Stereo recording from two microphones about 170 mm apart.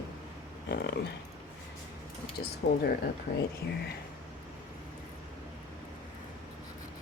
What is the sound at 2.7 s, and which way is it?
Speech, 65° left (ahead or behind).